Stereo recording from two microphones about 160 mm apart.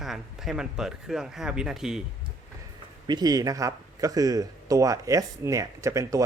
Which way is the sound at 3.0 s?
25° right (ahead or behind).